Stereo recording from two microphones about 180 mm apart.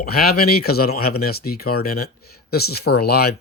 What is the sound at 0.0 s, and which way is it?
Speech, 60° left (ahead or behind).